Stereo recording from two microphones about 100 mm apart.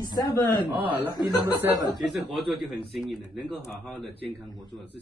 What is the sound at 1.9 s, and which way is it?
Speech, centre (ahead or behind).